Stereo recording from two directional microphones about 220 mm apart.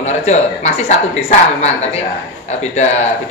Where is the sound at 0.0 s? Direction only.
30° left (ahead or behind).